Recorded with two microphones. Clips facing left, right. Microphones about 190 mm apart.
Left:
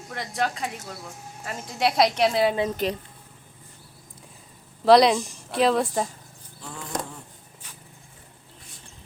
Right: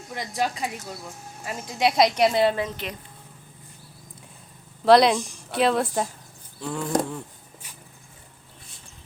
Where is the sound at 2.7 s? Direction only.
35° left (ahead or behind).